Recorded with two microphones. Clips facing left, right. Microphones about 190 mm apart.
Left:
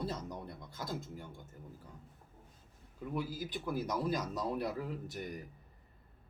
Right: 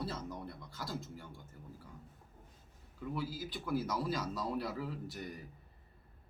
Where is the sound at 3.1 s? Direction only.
20° left (ahead or behind).